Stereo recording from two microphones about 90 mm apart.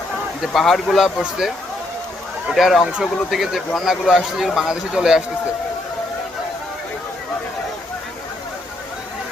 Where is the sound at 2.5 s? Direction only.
Centre (ahead or behind).